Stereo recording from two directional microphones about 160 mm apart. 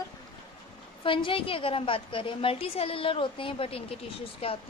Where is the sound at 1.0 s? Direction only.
30° left (ahead or behind).